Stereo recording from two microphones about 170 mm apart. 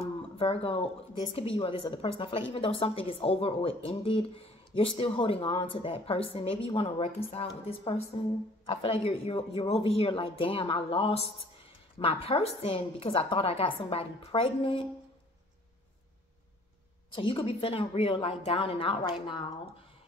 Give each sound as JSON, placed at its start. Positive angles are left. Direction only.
{"t": 0.0, "sound": "a sound", "side_deg": 35}
{"t": 1.3, "sound": "a woman's voice", "side_deg": 35}
{"t": 9.0, "sound": "a woman's voice", "side_deg": 35}
{"t": 17.1, "sound": "a woman's voice", "side_deg": 30}